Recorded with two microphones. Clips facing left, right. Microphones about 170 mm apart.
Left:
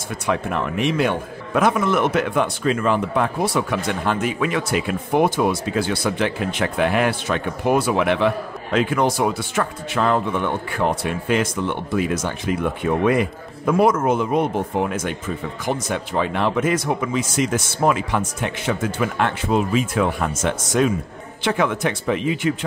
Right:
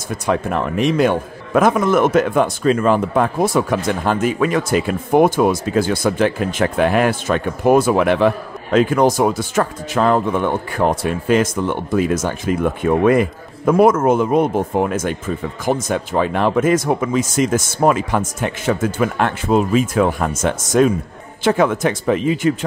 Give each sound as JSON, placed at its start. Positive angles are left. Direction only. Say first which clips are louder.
{"t": 0.3, "sound": "a man's voice", "louder": "right 3 dB", "side_deg": -40}